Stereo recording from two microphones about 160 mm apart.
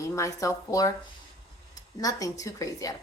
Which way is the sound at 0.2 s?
20° left (ahead or behind).